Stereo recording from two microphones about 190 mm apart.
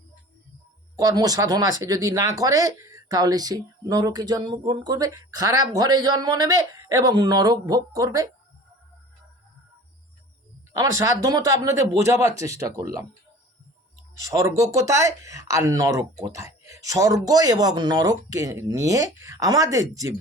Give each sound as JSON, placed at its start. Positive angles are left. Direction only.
{"t": 0.9, "sound": "speech", "side_deg": -20}
{"t": 10.8, "sound": "speech", "side_deg": -20}
{"t": 14.3, "sound": "speech", "side_deg": -15}